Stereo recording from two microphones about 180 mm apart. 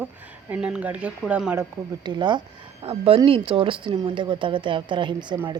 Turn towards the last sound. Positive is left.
turn(degrees=-25)  # may be behind; listen again after turning